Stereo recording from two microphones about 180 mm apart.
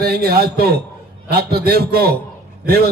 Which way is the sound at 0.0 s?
60° right (ahead or behind).